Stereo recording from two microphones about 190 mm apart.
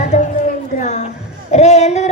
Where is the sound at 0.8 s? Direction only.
40° left (ahead or behind).